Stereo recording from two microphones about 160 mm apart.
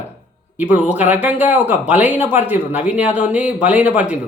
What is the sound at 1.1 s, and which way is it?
Speech, 10° right (ahead or behind).